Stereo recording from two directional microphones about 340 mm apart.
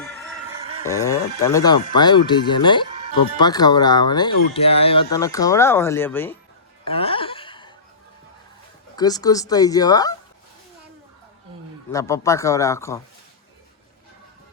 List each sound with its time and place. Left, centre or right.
0.9 s speech: centre
6.8 s chuckle: centre
9.0 s speech: centre
11.9 s speech: centre